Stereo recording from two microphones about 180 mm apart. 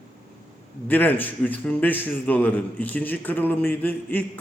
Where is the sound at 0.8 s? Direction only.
10° left (ahead or behind).